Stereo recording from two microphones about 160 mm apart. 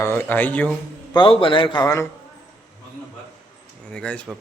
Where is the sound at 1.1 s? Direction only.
30° left (ahead or behind).